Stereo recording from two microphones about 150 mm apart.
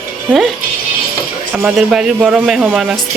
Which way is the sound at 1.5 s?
10° right (ahead or behind).